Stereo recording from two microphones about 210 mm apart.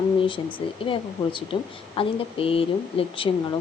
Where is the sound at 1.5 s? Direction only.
25° left (ahead or behind).